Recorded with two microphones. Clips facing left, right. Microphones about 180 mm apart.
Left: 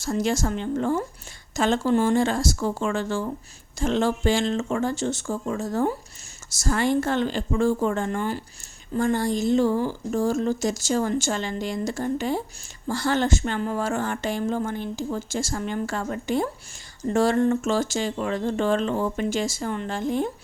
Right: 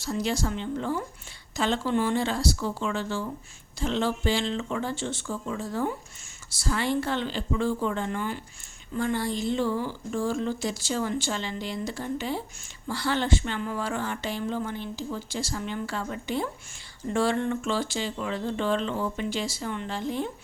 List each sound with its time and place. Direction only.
0.0 s speech: 50° left (ahead or behind)